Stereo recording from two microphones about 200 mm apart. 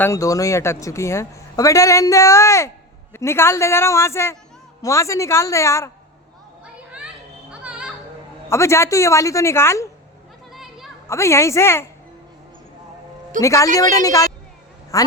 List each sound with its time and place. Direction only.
0.0 s a man's voice: 15° left (ahead or behind)
7.6 s music: 5° right (ahead or behind)
8.4 s a man's voice: 15° left (ahead or behind)
10.5 s children playing: centre (ahead or behind)
11.1 s a man's voice: 15° left (ahead or behind)
13.4 s a man's voice: 15° left (ahead or behind)